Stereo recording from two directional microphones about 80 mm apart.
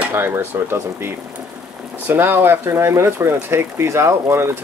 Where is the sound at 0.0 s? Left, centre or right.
Right.